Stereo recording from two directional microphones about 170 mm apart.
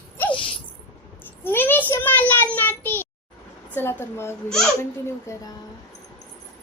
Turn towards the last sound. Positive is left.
turn(degrees=15)  # may be behind; listen again after turning